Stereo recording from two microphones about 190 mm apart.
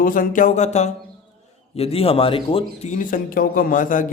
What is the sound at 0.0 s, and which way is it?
A man's voice, 45° left (ahead or behind).